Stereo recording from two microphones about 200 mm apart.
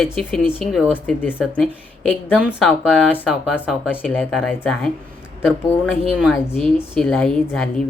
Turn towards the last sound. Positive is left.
turn(degrees=5)  # may be behind; listen again after turning